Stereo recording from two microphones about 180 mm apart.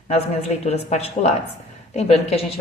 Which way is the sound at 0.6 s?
35° left (ahead or behind).